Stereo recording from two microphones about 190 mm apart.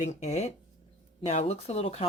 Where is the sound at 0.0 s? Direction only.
35° left (ahead or behind).